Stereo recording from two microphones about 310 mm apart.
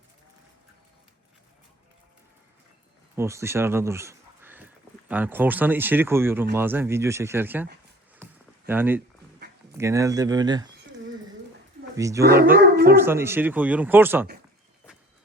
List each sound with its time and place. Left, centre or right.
3.2 s speech: centre
11.9 s speech: centre
12.7 s howl: right
13.0 s speech: centre